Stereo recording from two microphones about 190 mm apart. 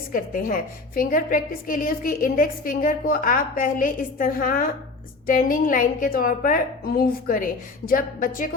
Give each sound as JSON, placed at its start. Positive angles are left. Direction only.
{"t": 0.1, "sound": "a woman's voice", "side_deg": 50}